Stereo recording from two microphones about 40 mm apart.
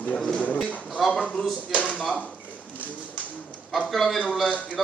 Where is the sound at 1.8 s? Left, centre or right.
Left.